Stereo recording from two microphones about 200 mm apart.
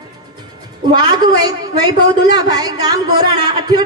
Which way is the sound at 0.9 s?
20° right (ahead or behind).